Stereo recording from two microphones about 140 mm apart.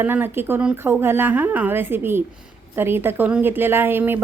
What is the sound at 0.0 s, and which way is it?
A woman's voice, 15° right (ahead or behind).